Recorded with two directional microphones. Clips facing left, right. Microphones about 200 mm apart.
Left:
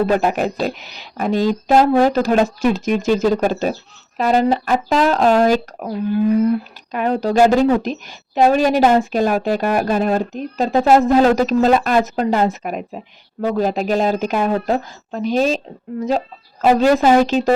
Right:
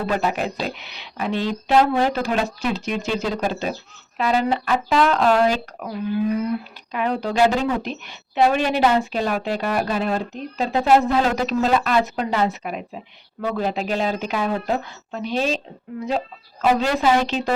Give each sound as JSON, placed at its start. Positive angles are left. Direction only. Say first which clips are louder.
{"t": 0.2, "sound": "a woman's voice", "louder": "left 5 dB", "side_deg": 45}
{"t": 6.9, "sound": "a woman's voice", "louder": "left 6 dB", "side_deg": 45}